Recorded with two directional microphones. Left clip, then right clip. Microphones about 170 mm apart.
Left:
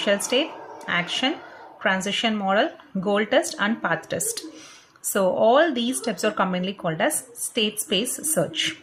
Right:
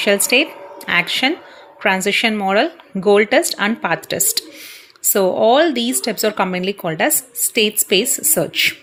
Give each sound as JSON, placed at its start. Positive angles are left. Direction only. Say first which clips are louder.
{"t": 0.0, "sound": "speech", "louder": "right 7 dB", "side_deg": -30}